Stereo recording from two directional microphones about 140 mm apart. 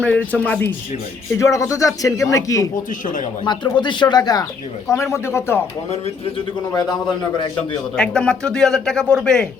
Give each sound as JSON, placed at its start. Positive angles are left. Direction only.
{"t": 0.0, "sound": "a man's voice", "side_deg": 10}
{"t": 1.3, "sound": "speech", "side_deg": 20}
{"t": 3.4, "sound": "speech", "side_deg": 35}
{"t": 6.7, "sound": "speech", "side_deg": 30}
{"t": 7.9, "sound": "speech", "side_deg": 5}